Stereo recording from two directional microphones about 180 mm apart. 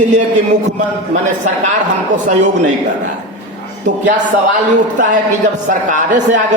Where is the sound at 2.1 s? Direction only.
40° right (ahead or behind).